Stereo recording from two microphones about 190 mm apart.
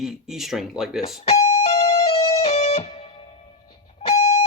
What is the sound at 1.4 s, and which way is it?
Music, 35° left (ahead or behind).